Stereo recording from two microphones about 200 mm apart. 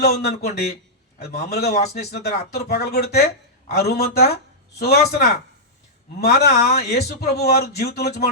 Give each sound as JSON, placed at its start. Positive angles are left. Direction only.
{"t": 0.0, "sound": "speech", "side_deg": 55}
{"t": 1.7, "sound": "speech", "side_deg": 35}
{"t": 2.0, "sound": "speech", "side_deg": 55}